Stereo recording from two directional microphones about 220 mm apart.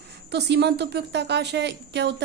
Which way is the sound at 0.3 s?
50° right (ahead or behind).